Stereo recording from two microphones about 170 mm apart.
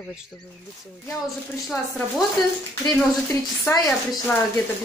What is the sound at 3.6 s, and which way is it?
Speech, 20° left (ahead or behind).